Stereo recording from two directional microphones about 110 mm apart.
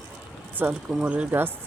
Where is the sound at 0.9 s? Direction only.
10° right (ahead or behind).